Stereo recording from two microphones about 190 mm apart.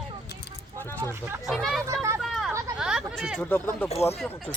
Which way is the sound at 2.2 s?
Centre (ahead or behind).